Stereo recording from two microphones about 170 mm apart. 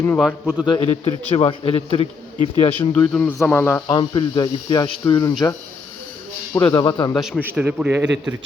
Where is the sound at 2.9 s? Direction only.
5° left (ahead or behind).